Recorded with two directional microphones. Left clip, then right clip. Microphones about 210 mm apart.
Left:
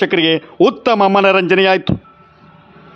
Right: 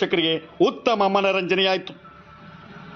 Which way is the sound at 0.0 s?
35° left (ahead or behind).